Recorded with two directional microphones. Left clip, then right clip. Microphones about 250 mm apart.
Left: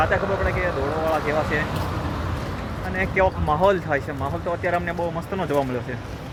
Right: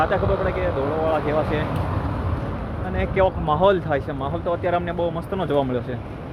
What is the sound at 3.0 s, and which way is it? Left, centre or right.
Speech, centre.